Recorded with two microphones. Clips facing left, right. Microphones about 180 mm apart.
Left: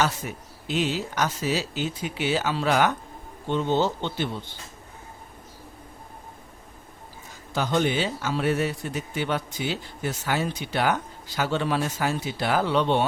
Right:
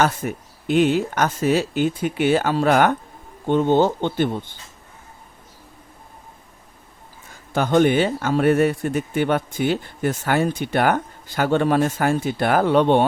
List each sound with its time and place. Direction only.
0.0 s a man's voice: 55° right (ahead or behind)
7.5 s a man's voice: 55° right (ahead or behind)